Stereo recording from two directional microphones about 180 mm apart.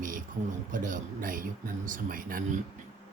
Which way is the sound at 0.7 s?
45° right (ahead or behind).